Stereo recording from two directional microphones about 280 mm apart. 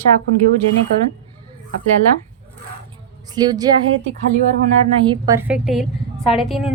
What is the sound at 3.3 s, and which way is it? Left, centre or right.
Speech, centre.